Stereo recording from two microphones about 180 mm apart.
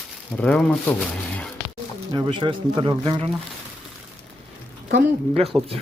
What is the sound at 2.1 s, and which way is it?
Speech, 25° right (ahead or behind).